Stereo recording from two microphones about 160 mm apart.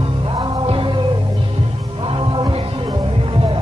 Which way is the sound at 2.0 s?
30° right (ahead or behind).